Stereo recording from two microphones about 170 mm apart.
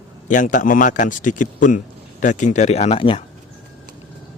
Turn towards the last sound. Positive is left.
turn(degrees=30)  # may be behind; listen again after turning